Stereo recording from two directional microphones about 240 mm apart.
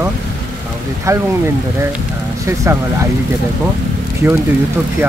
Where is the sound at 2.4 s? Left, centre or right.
Centre.